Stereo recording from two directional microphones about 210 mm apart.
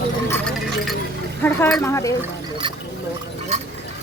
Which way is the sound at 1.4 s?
5° left (ahead or behind).